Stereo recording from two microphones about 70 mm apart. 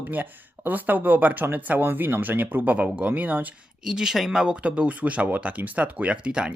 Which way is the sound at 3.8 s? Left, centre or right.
Centre.